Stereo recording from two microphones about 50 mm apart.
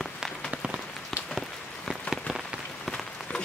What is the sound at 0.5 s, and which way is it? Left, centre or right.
Rain on surface, right.